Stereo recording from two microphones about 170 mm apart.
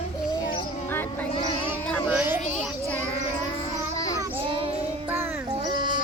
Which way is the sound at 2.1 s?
10° right (ahead or behind).